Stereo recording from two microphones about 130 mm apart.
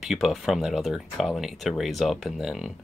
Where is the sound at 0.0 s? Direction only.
Centre (ahead or behind).